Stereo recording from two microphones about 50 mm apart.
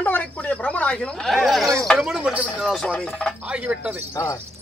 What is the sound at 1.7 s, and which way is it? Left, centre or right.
Speech, centre.